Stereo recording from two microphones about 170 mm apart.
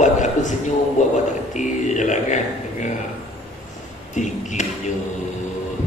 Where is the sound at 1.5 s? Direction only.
45° left (ahead or behind).